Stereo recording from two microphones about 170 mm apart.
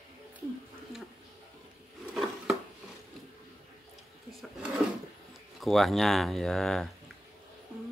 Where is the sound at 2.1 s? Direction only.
5° right (ahead or behind).